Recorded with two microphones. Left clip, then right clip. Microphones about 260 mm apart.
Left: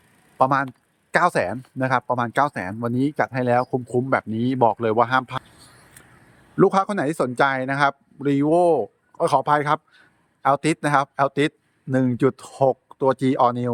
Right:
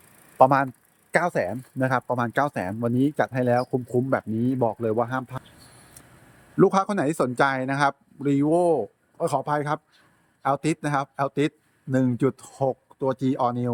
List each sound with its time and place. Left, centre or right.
0.3 s speech: centre
6.6 s speech: centre